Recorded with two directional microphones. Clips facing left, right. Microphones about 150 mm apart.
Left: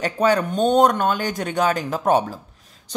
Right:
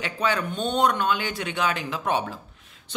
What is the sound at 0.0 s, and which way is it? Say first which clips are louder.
Speech: left 7 dB; 45° left (ahead or behind).